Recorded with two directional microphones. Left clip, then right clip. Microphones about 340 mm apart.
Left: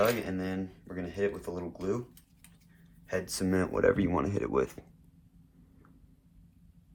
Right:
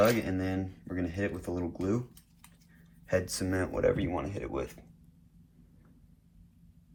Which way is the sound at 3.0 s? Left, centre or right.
Centre.